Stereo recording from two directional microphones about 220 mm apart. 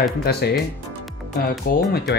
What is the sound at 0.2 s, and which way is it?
Speech, 45° left (ahead or behind).